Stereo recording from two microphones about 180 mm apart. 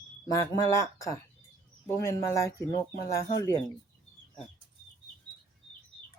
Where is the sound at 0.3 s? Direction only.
20° left (ahead or behind).